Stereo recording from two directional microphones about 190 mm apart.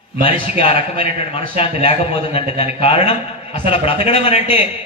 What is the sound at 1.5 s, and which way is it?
A man's voice, 30° left (ahead or behind).